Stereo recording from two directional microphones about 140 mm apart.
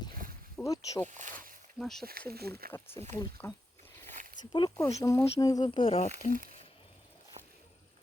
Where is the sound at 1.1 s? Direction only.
65° right (ahead or behind).